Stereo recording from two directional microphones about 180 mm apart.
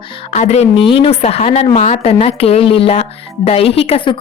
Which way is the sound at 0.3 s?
40° left (ahead or behind).